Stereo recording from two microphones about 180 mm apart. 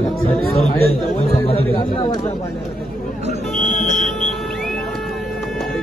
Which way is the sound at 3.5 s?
Centre (ahead or behind).